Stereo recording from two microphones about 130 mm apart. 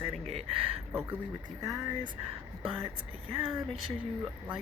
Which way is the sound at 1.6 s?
30° right (ahead or behind).